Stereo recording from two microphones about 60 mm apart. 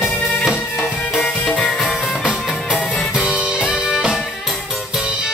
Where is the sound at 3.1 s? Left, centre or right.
Centre.